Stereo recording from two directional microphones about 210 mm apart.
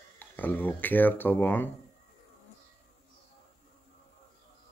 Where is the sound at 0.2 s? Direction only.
10° left (ahead or behind).